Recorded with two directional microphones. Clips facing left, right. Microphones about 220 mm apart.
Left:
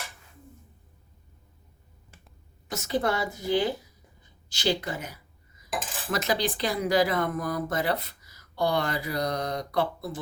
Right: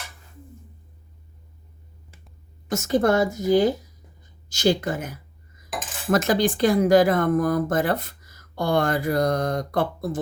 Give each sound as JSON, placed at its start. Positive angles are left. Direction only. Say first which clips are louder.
{"t": 2.6, "sound": "speech", "louder": "right 7 dB", "side_deg": -45}